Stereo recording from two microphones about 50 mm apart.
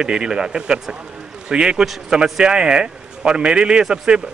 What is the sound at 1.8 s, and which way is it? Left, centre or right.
Speech, centre.